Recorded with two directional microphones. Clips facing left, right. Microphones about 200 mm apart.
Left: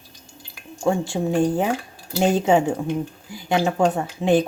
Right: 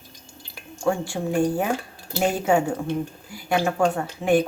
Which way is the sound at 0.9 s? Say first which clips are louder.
Left 3 dB; 25° left (ahead or behind).